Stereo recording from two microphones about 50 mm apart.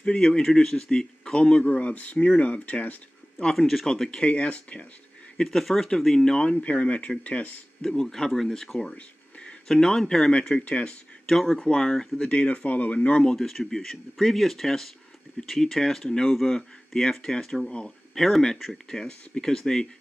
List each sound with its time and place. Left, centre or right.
0.0 s speech: left
3.3 s speech: centre
4.2 s speech: left
5.4 s speech: centre; by 7.6 s left
7.8 s speech: centre
8.9 s a sound: centre
9.7 s speech: centre
10.5 s speech: left
11.2 s speech: centre
12.4 s speech: left
13.2 s speech: centre
16.3 s speech: centre